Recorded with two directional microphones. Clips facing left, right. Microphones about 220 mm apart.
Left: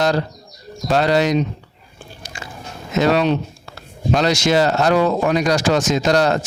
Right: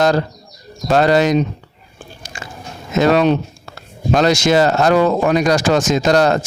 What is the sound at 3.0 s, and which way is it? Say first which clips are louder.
Speech: right 3 dB; 50° right (ahead or behind).